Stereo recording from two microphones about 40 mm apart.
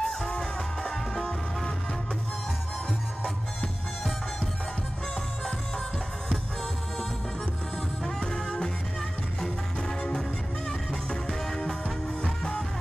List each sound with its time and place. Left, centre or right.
0.0 s music: left
8.0 s music: centre